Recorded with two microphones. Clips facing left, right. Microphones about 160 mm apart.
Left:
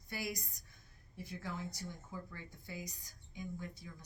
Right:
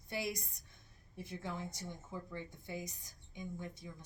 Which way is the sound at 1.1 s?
20° right (ahead or behind).